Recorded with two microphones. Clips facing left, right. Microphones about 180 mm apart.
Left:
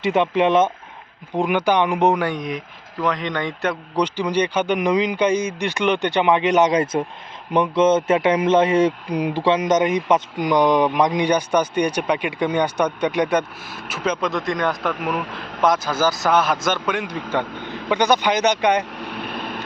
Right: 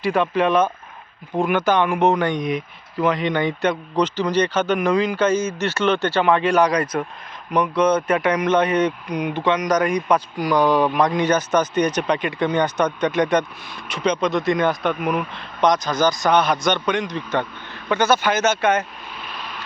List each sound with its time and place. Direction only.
0.0 s a man's voice: 20° left (ahead or behind); by 3.8 s centre (ahead or behind)
3.9 s a man's voice: 10° left (ahead or behind)
19.0 s vehicle: 60° left (ahead or behind)